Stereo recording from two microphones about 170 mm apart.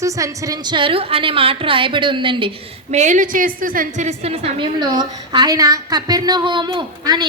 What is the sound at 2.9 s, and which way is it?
A woman's voice, 45° right (ahead or behind).